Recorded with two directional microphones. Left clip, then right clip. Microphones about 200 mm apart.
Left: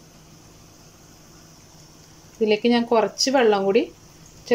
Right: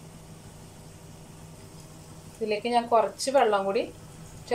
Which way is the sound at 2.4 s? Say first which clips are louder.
Left 6 dB; 50° left (ahead or behind).